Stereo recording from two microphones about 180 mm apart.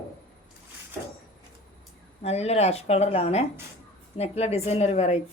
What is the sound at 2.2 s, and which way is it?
A woman's voice, 35° left (ahead or behind).